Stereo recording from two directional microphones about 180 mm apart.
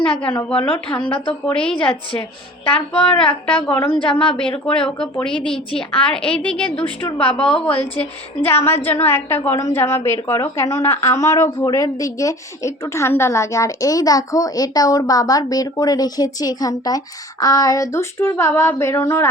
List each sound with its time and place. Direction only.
0.4 s a woman's voice: 5° left (ahead or behind)